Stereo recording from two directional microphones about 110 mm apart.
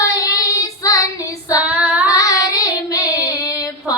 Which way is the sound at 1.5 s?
10° right (ahead or behind).